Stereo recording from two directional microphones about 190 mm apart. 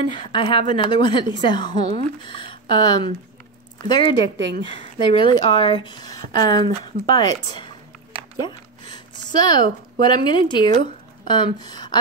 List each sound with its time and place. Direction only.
0.0 s a woman's voice: 25° left (ahead or behind)